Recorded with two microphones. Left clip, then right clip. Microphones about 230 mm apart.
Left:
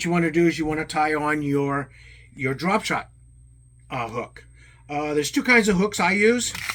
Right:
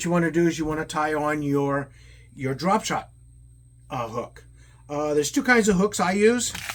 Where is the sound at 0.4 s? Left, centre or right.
Centre.